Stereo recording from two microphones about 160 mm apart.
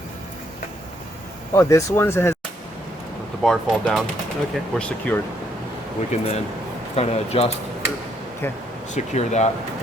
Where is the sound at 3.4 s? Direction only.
5° left (ahead or behind).